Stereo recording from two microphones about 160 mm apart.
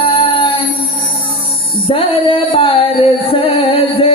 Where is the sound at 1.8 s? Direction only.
35° left (ahead or behind).